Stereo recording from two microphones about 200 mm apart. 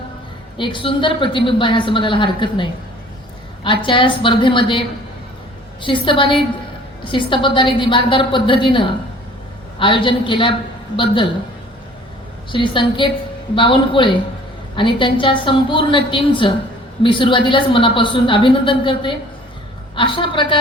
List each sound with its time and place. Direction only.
0.5 s a woman's voice: 25° left (ahead or behind)
12.5 s a woman's voice: 25° left (ahead or behind)